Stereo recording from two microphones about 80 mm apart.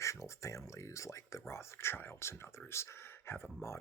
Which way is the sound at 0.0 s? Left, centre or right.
Left.